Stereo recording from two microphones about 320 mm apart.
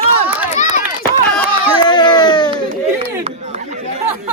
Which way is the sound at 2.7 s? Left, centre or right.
Right.